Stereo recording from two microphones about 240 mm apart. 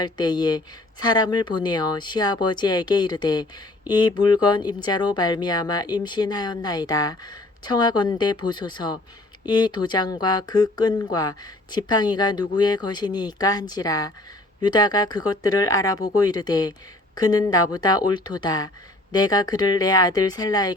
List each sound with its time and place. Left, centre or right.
0.0 s speech: centre